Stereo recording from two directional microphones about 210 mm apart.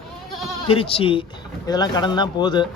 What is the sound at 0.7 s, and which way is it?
Speech, 25° left (ahead or behind).